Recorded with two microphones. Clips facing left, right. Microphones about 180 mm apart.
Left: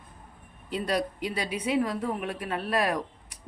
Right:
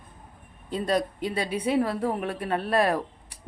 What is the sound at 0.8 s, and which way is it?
Speech, 25° right (ahead or behind).